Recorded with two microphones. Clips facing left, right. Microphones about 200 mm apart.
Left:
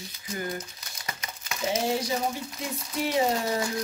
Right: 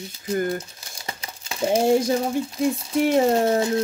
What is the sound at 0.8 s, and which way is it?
Crumpling, 30° right (ahead or behind).